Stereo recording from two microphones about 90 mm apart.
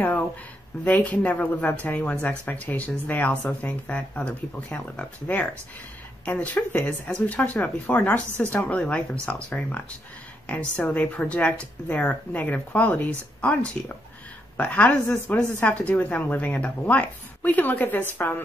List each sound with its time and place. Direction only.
0.8 s a woman's voice: 15° left (ahead or behind)